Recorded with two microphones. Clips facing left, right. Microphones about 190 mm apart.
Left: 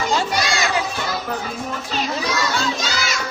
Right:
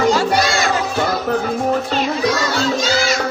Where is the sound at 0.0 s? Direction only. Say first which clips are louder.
Right 6 dB; 50° right (ahead or behind).